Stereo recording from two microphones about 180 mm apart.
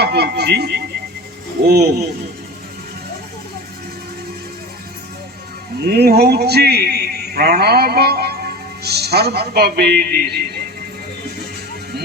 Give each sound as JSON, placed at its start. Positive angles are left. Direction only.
{"t": 0.0, "sound": "speech", "side_deg": -65}
{"t": 5.8, "sound": "a man's voice", "side_deg": -60}